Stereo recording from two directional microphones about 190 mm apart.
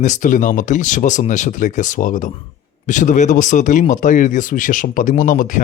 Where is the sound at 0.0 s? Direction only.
40° left (ahead or behind).